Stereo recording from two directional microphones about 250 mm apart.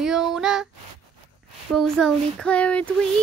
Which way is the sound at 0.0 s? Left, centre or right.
Centre.